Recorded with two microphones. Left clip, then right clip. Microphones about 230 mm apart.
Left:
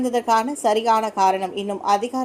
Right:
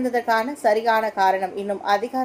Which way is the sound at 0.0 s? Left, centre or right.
Left.